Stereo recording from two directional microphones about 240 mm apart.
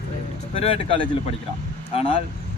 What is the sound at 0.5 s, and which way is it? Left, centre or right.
A man's voice, left.